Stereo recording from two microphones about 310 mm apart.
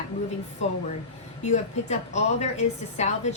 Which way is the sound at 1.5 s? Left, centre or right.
Left.